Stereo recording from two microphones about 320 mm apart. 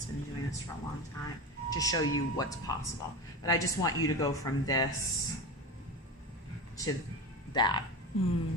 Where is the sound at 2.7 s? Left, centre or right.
Centre.